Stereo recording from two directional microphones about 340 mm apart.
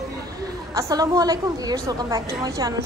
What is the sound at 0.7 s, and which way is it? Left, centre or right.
A woman's voice, centre.